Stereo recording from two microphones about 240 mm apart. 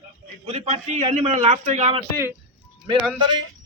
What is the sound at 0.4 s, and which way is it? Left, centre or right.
A man's voice, right.